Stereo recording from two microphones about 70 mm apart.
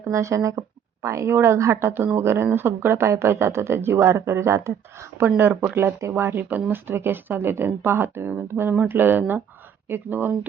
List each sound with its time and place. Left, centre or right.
0.1 s speech: right